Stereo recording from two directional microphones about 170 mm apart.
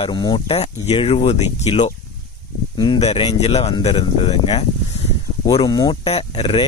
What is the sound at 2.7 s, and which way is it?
Speech, 25° left (ahead or behind).